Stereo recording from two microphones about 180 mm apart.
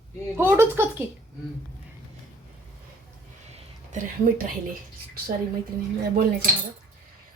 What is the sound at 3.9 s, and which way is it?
Speech, 45° right (ahead or behind).